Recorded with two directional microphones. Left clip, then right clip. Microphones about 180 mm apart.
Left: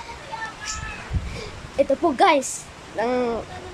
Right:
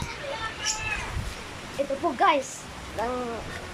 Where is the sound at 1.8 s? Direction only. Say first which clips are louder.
Left 6 dB; 30° left (ahead or behind).